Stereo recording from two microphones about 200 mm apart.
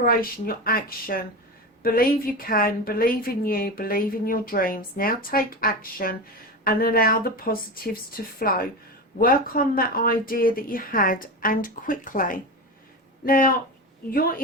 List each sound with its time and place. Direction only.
0.0 s a woman's voice: 45° left (ahead or behind)